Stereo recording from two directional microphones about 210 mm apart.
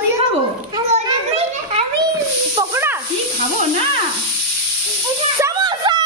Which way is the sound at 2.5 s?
15° right (ahead or behind).